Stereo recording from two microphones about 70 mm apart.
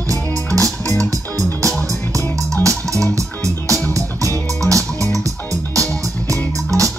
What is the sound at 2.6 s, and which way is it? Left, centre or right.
Music, right.